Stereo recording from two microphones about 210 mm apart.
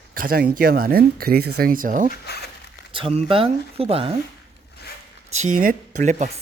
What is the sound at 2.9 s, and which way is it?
Speech, 25° right (ahead or behind).